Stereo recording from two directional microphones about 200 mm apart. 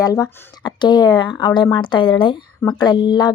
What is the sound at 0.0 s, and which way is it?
Speech, 15° left (ahead or behind).